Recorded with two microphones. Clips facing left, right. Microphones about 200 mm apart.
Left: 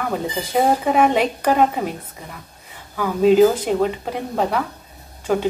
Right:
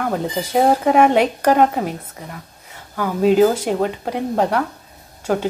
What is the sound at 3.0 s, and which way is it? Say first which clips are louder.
Speech: left 1 dB; 5° right (ahead or behind).